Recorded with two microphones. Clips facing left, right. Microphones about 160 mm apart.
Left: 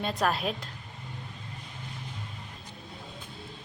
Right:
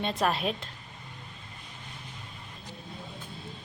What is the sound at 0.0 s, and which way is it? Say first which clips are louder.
Speech: even; centre (ahead or behind).